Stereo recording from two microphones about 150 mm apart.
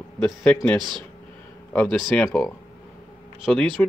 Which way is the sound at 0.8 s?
30° right (ahead or behind).